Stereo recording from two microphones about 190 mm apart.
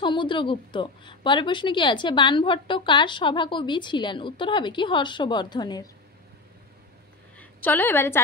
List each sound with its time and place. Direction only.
0.0 s a woman's voice: 25° left (ahead or behind)
7.3 s a woman's voice: 10° left (ahead or behind)